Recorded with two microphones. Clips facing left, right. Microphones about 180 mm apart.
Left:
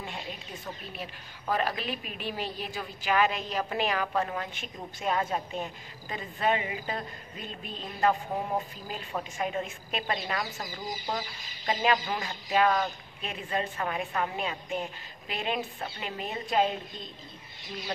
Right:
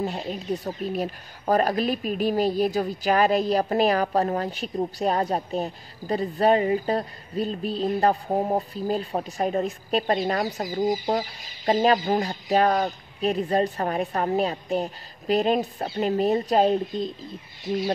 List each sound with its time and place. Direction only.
0.0 s speech: 40° right (ahead or behind)